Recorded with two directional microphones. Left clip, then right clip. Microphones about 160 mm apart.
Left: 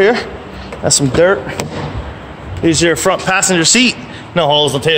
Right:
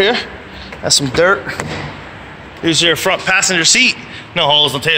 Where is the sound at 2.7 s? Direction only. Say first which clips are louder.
Left 1 dB; 45° left (ahead or behind).